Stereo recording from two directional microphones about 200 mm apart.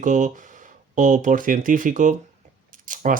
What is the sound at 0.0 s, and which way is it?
Speech, 40° right (ahead or behind).